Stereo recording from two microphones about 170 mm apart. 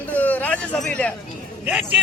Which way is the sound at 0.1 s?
10° left (ahead or behind).